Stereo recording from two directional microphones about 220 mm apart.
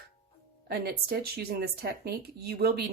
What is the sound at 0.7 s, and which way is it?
Speech, 45° right (ahead or behind).